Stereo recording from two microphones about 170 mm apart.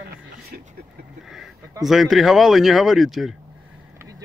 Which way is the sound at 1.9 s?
Centre (ahead or behind).